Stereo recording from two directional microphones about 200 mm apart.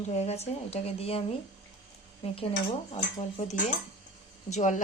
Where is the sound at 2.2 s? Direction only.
30° left (ahead or behind).